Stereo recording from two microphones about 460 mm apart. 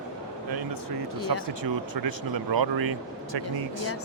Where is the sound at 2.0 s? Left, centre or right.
Right.